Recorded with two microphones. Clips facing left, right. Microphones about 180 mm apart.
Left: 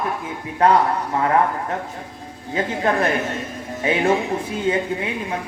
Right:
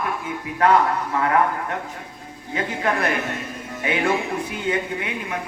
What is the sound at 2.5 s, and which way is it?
Speech, 30° left (ahead or behind).